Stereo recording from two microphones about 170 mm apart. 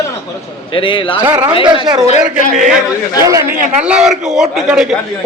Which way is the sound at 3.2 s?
20° right (ahead or behind).